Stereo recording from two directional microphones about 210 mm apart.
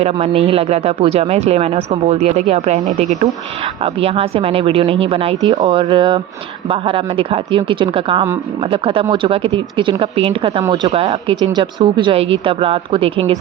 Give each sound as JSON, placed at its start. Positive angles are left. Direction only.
{"t": 0.0, "sound": "speech", "side_deg": -30}